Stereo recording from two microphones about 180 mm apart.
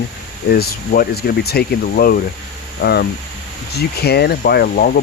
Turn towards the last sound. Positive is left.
turn(degrees=55)  # may be behind; listen again after turning